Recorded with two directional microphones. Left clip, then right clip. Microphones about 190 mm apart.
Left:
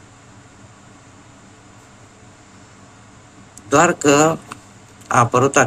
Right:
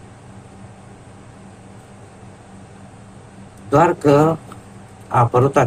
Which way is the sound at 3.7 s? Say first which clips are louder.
Even; 35° left (ahead or behind).